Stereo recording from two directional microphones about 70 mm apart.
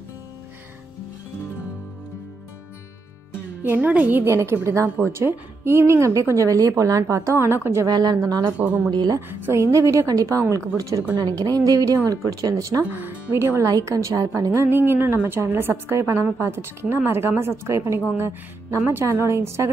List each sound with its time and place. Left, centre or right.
3.6 s speech: right
4.3 s a woman's voice: right
7.8 s a woman's voice: right
8.2 s speech: right
8.5 s speech: right
9.3 s a woman's voice: right
11.1 s a woman's voice: right
11.6 s speech: right
12.8 s speech: right
13.3 s a woman's voice: right
13.7 s a woman's voice: right
14.6 s a woman's voice: right